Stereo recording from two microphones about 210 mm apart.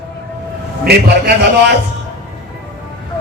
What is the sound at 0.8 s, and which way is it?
Music, 50° right (ahead or behind).